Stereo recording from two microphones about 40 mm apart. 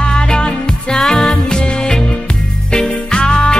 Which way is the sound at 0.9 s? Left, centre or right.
Centre.